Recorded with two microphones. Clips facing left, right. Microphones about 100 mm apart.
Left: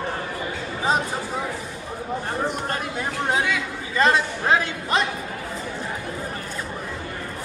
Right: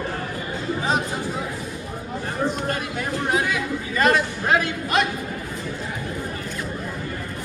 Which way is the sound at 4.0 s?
25° left (ahead or behind).